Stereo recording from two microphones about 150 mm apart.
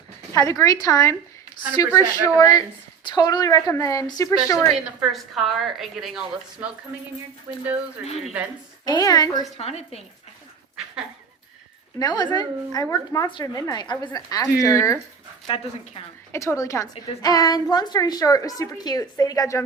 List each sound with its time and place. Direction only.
0.3 s a woman's voice: 20° left (ahead or behind)
4.7 s a woman's voice: centre (ahead or behind)
7.5 s a woman's voice: 15° right (ahead or behind)
8.8 s a woman's voice: 25° left (ahead or behind)
9.6 s a woman's voice: 45° left (ahead or behind)
11.9 s a woman's voice: 25° left (ahead or behind)
15.4 s speech: 35° left (ahead or behind)
16.3 s a woman's voice: 20° left (ahead or behind)